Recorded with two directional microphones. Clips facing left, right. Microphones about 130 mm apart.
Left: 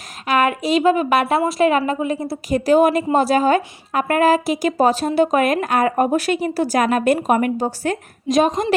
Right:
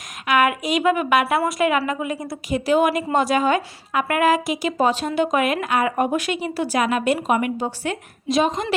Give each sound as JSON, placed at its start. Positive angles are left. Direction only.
{"t": 0.3, "sound": "a woman's voice", "side_deg": 35}